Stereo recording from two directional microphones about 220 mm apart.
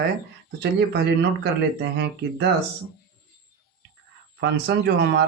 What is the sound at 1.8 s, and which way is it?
Speech, 50° right (ahead or behind).